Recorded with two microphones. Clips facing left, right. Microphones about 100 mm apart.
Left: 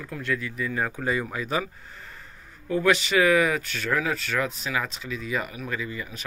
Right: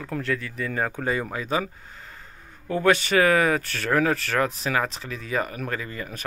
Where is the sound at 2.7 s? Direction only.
40° right (ahead or behind).